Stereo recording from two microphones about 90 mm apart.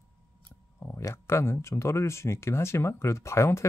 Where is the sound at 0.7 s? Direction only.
30° left (ahead or behind).